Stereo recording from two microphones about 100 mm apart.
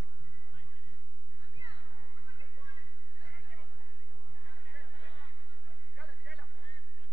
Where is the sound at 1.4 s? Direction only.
45° right (ahead or behind).